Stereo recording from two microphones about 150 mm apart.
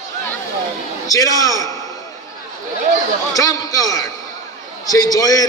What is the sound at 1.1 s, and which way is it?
Speech, 25° left (ahead or behind).